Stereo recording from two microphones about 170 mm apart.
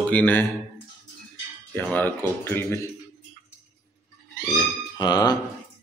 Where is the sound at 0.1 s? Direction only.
10° left (ahead or behind).